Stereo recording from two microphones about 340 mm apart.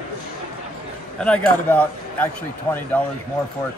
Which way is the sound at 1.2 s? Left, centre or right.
Centre.